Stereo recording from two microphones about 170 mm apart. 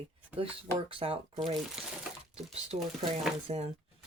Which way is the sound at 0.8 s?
30° right (ahead or behind).